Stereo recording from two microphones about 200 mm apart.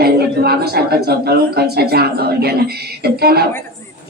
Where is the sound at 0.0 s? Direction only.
50° right (ahead or behind).